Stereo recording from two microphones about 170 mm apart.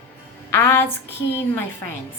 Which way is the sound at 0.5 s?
15° left (ahead or behind).